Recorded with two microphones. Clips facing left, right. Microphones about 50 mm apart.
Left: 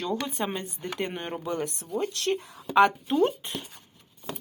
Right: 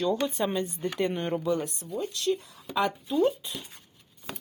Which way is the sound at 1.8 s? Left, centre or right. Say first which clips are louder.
Left 2 dB; left.